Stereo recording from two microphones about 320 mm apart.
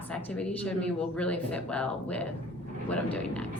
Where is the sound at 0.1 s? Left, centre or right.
Centre.